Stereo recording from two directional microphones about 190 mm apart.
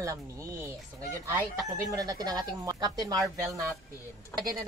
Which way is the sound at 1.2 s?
15° right (ahead or behind).